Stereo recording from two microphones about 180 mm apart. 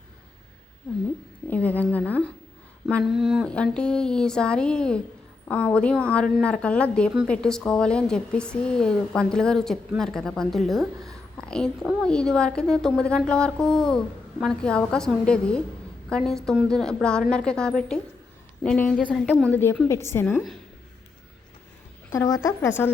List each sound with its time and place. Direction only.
1.5 s a woman's voice: 10° left (ahead or behind)
2.9 s a woman's voice: centre (ahead or behind); by 20.2 s 15° left (ahead or behind)
20.2 s a woman's voice: centre (ahead or behind)
22.1 s a woman's voice: 15° left (ahead or behind)